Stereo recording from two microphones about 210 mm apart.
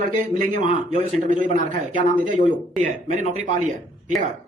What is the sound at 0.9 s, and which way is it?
Speech, 35° right (ahead or behind).